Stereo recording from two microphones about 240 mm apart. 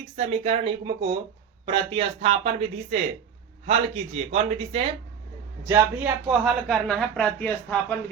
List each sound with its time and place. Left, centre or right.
0.2 s speech: right
5.6 s speech: centre